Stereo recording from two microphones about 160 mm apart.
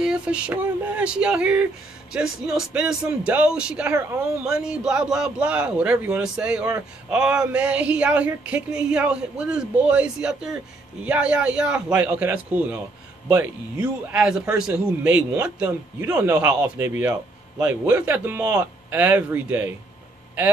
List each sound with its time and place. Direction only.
0.0 s speech: 5° right (ahead or behind)